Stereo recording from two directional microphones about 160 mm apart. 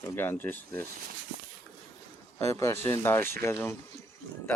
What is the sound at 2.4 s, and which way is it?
Speech, 20° left (ahead or behind).